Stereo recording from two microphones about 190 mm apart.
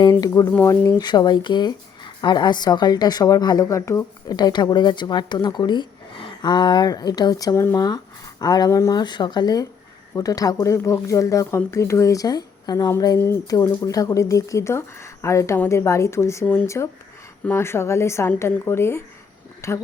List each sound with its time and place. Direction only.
0.0 s speech: 20° left (ahead or behind)